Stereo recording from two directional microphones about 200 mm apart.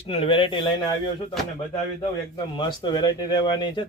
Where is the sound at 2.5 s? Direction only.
20° left (ahead or behind).